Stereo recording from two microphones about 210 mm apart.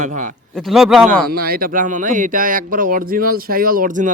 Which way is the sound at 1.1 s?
45° right (ahead or behind).